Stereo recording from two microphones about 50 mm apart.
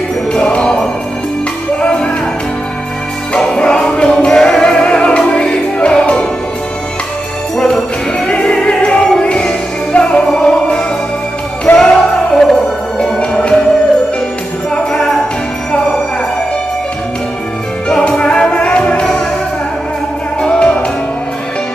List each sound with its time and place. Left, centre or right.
0.3 s music: left
3.3 s music: centre
8.3 s music: left
11.6 s music: centre
13.2 s music: left
14.9 s jingle bell: centre
18.0 s music: centre
20.4 s music: left